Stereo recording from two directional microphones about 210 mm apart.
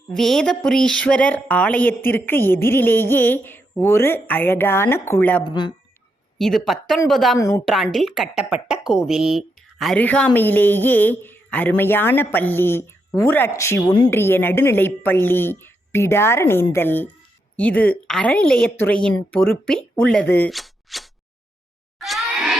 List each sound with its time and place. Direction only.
0.1 s speech: centre (ahead or behind)
5.4 s speech: 20° left (ahead or behind)
6.4 s a woman's voice: centre (ahead or behind)
7.3 s speech: 15° left (ahead or behind)
7.6 s a woman's voice: centre (ahead or behind)
21.9 s grunt: centre (ahead or behind)